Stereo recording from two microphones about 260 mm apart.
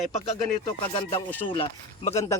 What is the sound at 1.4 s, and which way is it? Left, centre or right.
Speech, centre.